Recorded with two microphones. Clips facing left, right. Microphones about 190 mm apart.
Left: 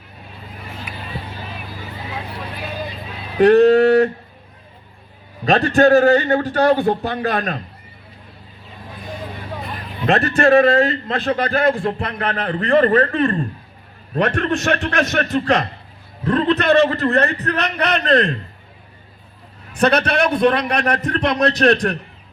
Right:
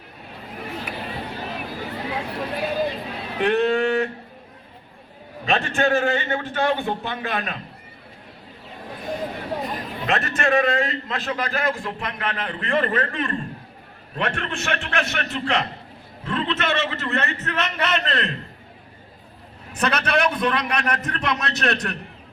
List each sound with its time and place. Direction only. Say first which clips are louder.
0.9 s music: right 1 dB; 60° right (ahead or behind)
3.4 s a man's voice: left 9 dB; 40° left (ahead or behind)
5.5 s a man's voice: left 8 dB; 40° left (ahead or behind)
10.1 s a man's voice: left 8 dB; 35° left (ahead or behind)
19.8 s a man's voice: left 5 dB; 35° left (ahead or behind)